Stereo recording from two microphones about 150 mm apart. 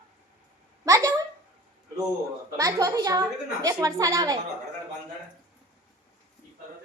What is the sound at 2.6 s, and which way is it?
A woman's voice, 25° right (ahead or behind).